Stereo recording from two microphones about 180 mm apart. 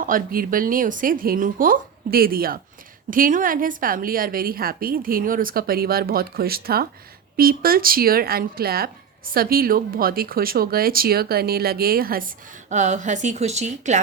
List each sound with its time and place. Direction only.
0.0 s a woman's voice: 50° right (ahead or behind)